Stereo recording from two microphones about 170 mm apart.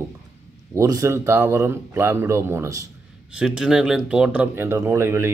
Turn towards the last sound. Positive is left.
turn(degrees=-15)  # may be behind; listen again after turning